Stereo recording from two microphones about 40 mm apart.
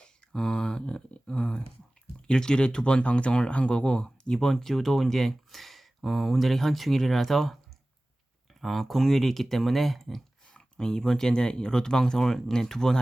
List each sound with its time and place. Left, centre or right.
0.0 s a sound: left
2.2 s speech: centre
8.6 s speech: centre
10.5 s speech: centre